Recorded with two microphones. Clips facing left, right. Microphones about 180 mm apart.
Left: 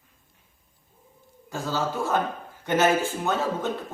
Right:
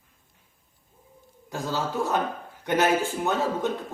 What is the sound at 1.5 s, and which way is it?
A man's voice, 15° right (ahead or behind).